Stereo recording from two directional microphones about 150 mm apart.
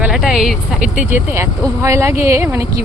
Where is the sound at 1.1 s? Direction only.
15° right (ahead or behind).